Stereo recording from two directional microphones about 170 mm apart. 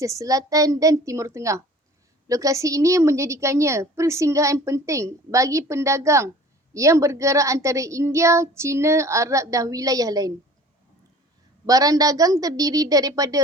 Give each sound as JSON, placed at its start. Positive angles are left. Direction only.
{"t": 0.0, "sound": "a woman's voice", "side_deg": -20}
{"t": 11.6, "sound": "a woman's voice", "side_deg": -20}